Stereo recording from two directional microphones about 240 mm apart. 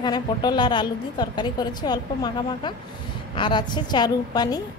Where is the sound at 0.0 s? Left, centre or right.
Centre.